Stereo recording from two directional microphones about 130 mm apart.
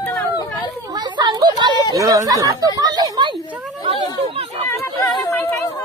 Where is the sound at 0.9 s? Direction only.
35° right (ahead or behind).